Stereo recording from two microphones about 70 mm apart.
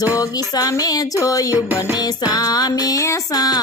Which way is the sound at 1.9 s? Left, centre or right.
Left.